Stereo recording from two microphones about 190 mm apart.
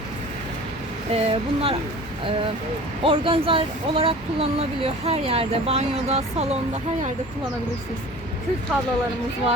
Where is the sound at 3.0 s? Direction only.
30° right (ahead or behind).